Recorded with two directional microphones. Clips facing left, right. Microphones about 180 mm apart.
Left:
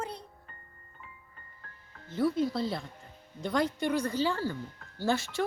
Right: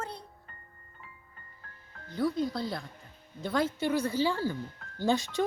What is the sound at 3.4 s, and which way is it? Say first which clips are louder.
Speech: even; 5° right (ahead or behind).